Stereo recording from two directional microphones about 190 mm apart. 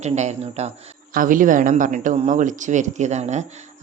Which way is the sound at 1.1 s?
45° right (ahead or behind).